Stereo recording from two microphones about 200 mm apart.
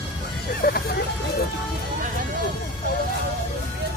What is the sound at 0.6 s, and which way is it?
Speech, 50° left (ahead or behind).